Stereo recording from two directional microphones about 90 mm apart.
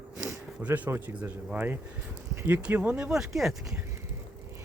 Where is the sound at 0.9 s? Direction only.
25° right (ahead or behind); by 3.8 s 5° right (ahead or behind).